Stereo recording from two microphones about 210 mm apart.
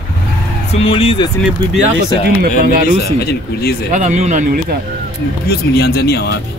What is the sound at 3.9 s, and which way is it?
Speech, 35° right (ahead or behind).